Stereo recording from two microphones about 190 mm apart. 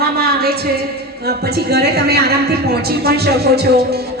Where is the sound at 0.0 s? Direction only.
55° right (ahead or behind).